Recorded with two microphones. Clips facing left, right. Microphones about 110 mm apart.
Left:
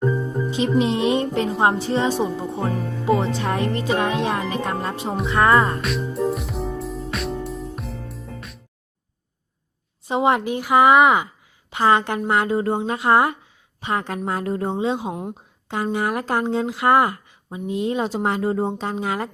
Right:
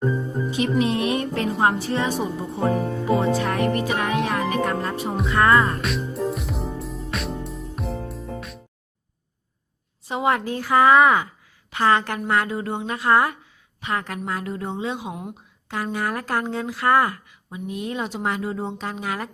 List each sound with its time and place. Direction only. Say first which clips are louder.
0.5 s speech: left 2 dB; 25° left (ahead or behind)
5.8 s music: left 2 dB; centre (ahead or behind)
10.1 s speech: left 3 dB; 25° left (ahead or behind)
15.7 s speech: left 3 dB; 20° left (ahead or behind); by 18.8 s 45° left (ahead or behind)
18.8 s speech: left 4 dB; 30° left (ahead or behind)